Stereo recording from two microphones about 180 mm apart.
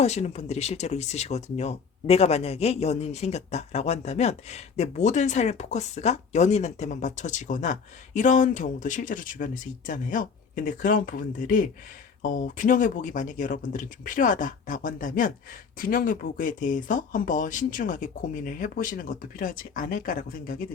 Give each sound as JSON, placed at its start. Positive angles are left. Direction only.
{"t": 0.0, "sound": "speech", "side_deg": 40}